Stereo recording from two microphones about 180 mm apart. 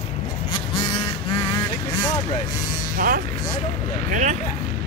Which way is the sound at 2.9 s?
55° right (ahead or behind).